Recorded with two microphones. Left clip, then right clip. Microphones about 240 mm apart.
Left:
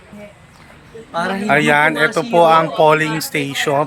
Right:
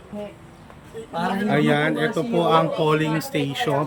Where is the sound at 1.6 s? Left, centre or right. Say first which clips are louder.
Left 8 dB; centre.